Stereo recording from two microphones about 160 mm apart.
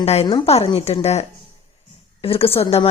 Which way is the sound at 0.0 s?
40° left (ahead or behind).